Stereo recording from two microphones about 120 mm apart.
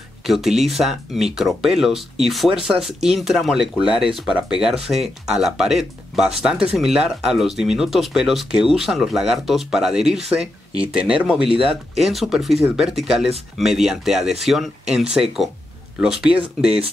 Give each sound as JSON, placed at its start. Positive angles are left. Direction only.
{"t": 0.3, "sound": "speech", "side_deg": 0}